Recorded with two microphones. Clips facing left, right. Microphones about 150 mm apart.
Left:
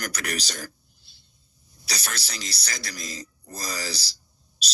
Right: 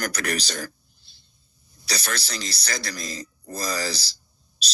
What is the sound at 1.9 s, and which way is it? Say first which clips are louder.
Speech: right 5 dB; 55° right (ahead or behind).